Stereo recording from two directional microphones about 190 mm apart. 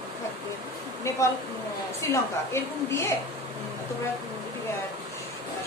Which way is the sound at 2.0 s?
15° left (ahead or behind).